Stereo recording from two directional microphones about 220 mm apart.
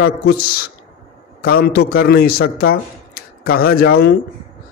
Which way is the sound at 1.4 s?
45° left (ahead or behind).